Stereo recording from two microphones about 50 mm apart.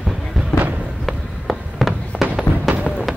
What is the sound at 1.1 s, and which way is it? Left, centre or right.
Fireworks, centre.